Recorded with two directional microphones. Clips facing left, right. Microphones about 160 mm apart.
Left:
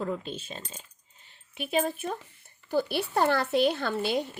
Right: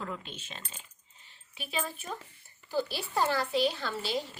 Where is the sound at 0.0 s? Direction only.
40° left (ahead or behind).